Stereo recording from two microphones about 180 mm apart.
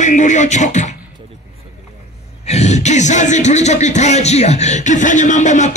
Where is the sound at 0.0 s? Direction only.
40° left (ahead or behind).